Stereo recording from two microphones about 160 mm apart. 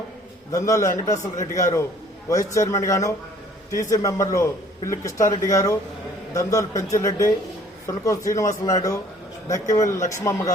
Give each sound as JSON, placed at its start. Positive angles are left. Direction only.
{"t": 0.5, "sound": "a man's voice", "side_deg": 20}